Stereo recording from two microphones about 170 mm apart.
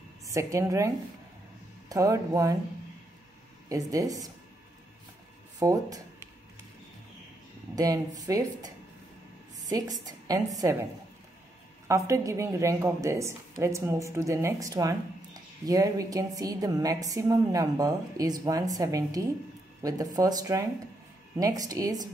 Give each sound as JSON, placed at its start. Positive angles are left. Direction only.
{"t": 0.3, "sound": "a woman's voice", "side_deg": -15}
{"t": 3.6, "sound": "a woman's voice", "side_deg": -20}
{"t": 5.6, "sound": "speech", "side_deg": -20}
{"t": 7.7, "sound": "a woman's voice", "side_deg": -20}
{"t": 11.9, "sound": "a woman's voice", "side_deg": -20}